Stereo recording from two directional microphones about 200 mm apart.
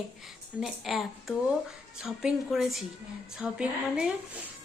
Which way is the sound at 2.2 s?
Centre (ahead or behind).